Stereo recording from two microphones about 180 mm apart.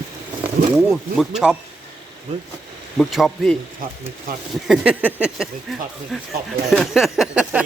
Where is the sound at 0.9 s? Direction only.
5° right (ahead or behind).